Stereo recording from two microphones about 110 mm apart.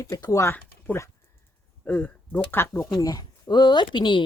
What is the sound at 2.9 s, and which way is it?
Speech, 35° left (ahead or behind).